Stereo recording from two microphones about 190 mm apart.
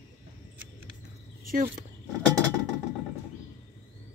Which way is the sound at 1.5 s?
45° right (ahead or behind).